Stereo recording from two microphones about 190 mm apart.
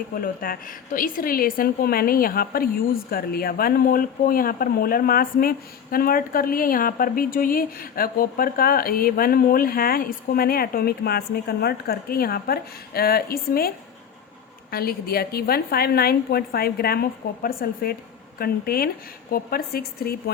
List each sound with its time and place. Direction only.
0.2 s speech: 50° left (ahead or behind)